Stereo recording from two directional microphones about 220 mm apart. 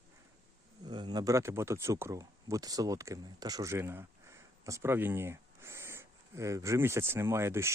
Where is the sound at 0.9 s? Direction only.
20° right (ahead or behind).